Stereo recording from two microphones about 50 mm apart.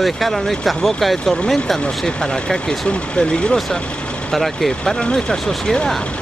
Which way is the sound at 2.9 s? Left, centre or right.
Centre.